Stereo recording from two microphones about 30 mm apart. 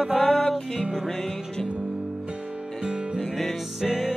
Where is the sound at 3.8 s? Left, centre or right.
Centre.